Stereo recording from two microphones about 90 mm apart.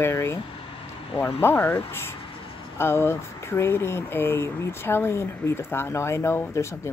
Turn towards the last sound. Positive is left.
turn(degrees=30)  # may be behind; listen again after turning